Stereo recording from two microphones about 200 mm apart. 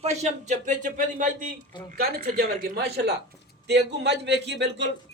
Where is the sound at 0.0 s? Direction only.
35° right (ahead or behind).